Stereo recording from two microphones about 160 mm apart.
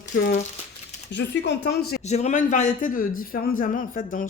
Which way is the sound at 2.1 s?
45° left (ahead or behind).